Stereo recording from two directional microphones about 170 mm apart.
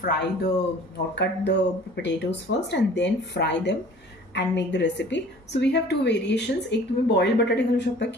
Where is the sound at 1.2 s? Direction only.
90° left.